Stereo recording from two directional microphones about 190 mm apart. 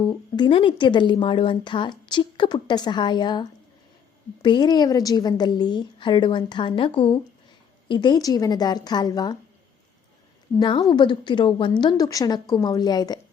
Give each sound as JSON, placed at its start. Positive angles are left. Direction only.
{"t": 0.0, "sound": "speech", "side_deg": 25}
{"t": 4.4, "sound": "speech", "side_deg": 20}
{"t": 10.6, "sound": "speech", "side_deg": 25}